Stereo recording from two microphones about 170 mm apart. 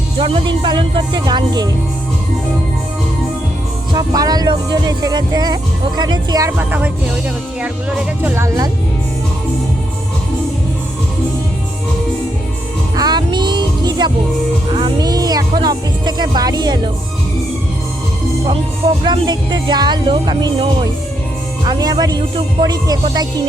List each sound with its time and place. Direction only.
0.2 s speech: 30° right (ahead or behind)
3.9 s speech: 20° right (ahead or behind)
6.7 s speech: 10° right (ahead or behind)
13.0 s music: 25° right (ahead or behind)
14.7 s speech: 30° right (ahead or behind)
19.0 s speech: 25° right (ahead or behind)